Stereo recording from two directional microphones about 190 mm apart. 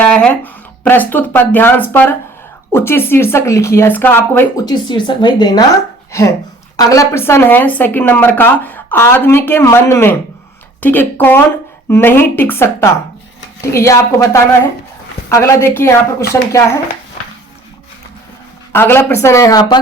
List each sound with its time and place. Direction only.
0.0 s speech: 5° left (ahead or behind)
18.7 s speech: 10° left (ahead or behind)